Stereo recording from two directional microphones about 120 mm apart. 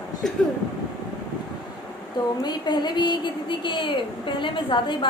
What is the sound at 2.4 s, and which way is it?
A woman's voice, 35° left (ahead or behind).